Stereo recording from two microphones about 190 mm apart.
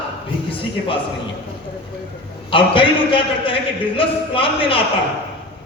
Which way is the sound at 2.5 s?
25° left (ahead or behind).